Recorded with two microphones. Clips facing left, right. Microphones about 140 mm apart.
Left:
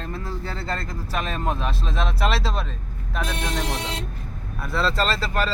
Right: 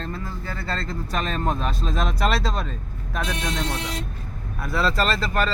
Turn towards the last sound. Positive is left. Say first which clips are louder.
# right 1 dB
turn(degrees=0)  # may be behind; listen again after turning